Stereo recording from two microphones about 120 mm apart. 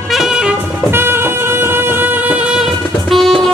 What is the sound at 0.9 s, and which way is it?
Music, 20° right (ahead or behind).